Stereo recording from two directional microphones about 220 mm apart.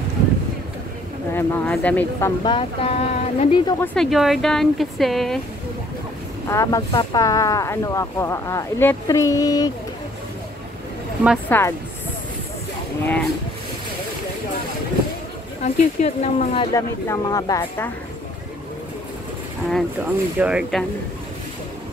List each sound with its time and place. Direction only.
1.3 s speech: 5° left (ahead or behind); by 3.7 s 30° left (ahead or behind)
3.8 s speech: 5° left (ahead or behind)
6.5 s speech: 15° left (ahead or behind)
11.4 s speech: 10° left (ahead or behind)
13.0 s speech: 5° left (ahead or behind)
15.6 s speech: 30° left (ahead or behind)
16.7 s speech: 15° left (ahead or behind)
20.3 s speech: 5° right (ahead or behind)